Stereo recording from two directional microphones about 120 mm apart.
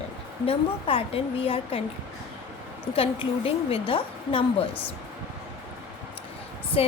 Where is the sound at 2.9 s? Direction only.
55° left (ahead or behind).